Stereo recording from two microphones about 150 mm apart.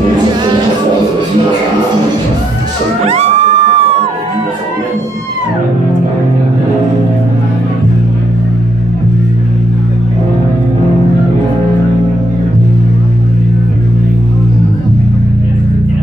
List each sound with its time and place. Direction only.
3.1 s crowd: 45° right (ahead or behind)